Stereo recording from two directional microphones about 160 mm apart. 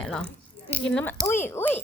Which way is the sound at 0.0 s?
5° left (ahead or behind).